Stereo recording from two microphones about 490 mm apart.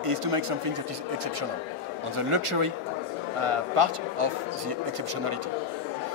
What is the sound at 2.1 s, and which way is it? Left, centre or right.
Speech, right.